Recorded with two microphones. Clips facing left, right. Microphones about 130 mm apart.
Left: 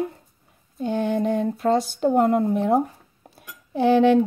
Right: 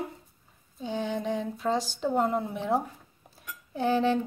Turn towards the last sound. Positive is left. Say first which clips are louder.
# left 9 dB
turn(degrees=70)  # may be behind; listen again after turning